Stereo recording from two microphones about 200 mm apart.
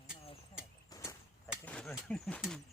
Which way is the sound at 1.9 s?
Centre (ahead or behind).